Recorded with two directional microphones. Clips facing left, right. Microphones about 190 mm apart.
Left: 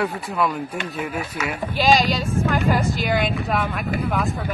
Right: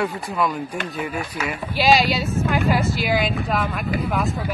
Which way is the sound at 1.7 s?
10° right (ahead or behind).